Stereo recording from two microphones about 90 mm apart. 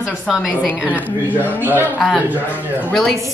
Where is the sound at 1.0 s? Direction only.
20° left (ahead or behind).